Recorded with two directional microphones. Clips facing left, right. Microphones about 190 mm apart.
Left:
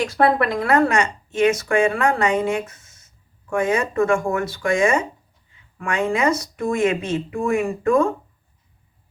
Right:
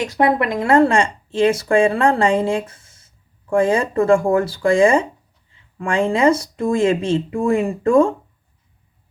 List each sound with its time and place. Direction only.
0.0 s speech: 20° right (ahead or behind)